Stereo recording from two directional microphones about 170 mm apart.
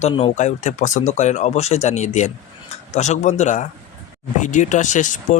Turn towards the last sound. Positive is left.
turn(degrees=45)  # may be behind; listen again after turning